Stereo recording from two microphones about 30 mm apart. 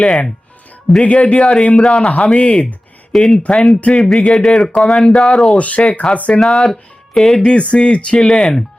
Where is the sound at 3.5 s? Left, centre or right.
Centre.